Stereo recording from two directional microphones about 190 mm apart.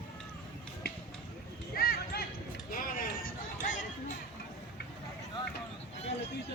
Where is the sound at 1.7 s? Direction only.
55° left (ahead or behind).